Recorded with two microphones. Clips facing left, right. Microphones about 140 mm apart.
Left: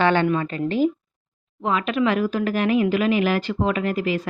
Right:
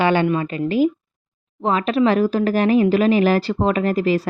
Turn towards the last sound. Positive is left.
turn(degrees=-35)  # may be behind; listen again after turning